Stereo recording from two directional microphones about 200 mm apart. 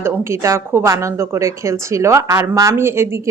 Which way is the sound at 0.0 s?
15° right (ahead or behind).